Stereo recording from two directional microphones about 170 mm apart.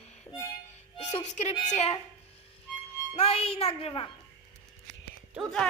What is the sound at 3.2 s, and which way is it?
Speech, 35° left (ahead or behind).